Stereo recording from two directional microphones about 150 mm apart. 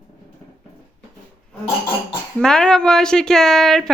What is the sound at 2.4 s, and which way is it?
Speech, 5° left (ahead or behind).